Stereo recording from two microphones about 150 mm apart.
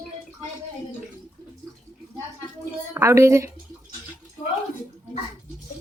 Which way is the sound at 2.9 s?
20° right (ahead or behind).